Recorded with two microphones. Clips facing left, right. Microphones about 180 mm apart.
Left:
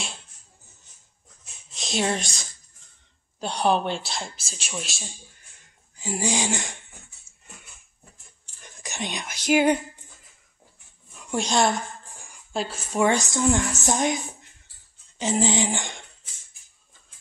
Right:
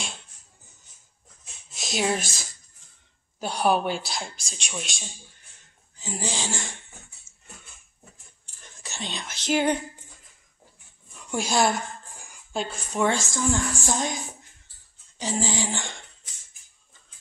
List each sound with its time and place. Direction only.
1.7 s speech: centre (ahead or behind); by 6.6 s 15° left (ahead or behind)
8.8 s speech: 15° left (ahead or behind)
11.2 s a woman's voice: 5° right (ahead or behind); by 14.1 s 20° left (ahead or behind)
15.1 s a sound: 20° left (ahead or behind)